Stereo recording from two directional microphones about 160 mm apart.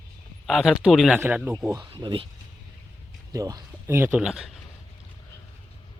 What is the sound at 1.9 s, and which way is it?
Speech, 35° right (ahead or behind).